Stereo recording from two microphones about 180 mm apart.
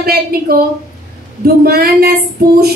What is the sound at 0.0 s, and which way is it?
Music, 55° right (ahead or behind).